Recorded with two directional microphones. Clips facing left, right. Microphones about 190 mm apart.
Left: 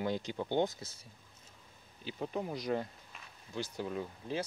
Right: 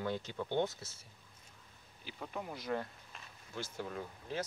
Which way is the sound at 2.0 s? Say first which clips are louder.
Left 6 dB; 25° left (ahead or behind).